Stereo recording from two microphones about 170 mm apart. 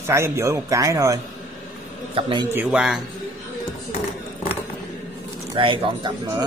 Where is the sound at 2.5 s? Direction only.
5° right (ahead or behind).